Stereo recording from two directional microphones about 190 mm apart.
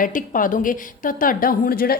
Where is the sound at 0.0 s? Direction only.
45° left (ahead or behind).